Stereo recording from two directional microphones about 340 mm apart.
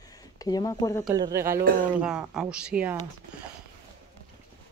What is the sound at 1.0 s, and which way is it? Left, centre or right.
Speech, centre.